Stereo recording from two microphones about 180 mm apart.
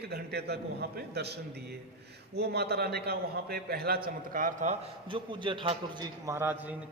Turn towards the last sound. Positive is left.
turn(degrees=-10)  # may be behind; listen again after turning